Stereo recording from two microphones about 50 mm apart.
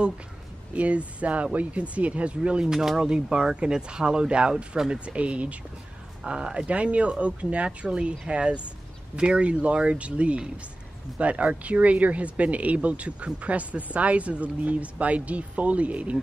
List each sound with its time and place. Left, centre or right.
0.7 s speech: right